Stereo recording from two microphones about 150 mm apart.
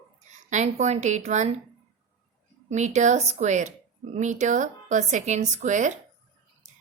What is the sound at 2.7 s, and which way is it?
A woman's voice, 50° right (ahead or behind).